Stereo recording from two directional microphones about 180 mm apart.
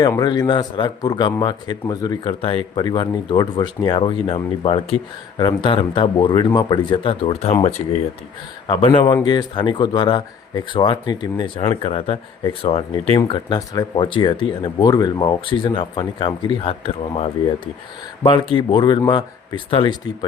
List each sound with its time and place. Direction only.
0.0 s speech: 20° left (ahead or behind)
11.8 s speech: 35° left (ahead or behind)